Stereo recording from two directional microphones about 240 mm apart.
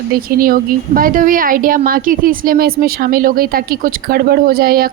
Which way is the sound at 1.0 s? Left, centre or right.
Right.